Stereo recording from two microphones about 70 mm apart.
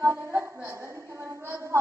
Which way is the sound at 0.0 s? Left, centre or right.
Right.